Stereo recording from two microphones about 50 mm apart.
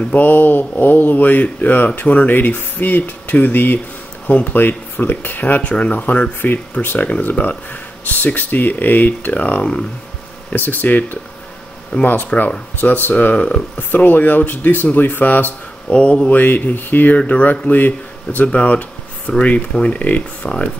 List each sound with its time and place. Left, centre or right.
0.1 s speech: left
5.6 s speech: left
7.1 s speech: left
10.5 s speech: left
13.2 s speech: left
13.7 s speech: left
15.9 s speech: left
16.3 s speech: left
18.5 s a sound: left
19.7 s speech: left